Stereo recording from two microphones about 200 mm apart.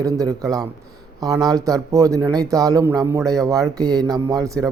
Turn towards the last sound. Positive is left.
turn(degrees=-15)  # may be behind; listen again after turning